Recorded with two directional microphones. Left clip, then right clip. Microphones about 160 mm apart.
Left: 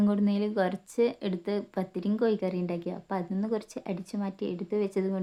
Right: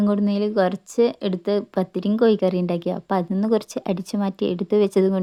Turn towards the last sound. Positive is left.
turn(degrees=-45)  # may be behind; listen again after turning